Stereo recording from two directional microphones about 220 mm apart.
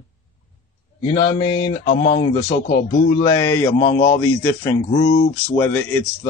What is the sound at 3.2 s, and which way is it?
Speech, 15° left (ahead or behind).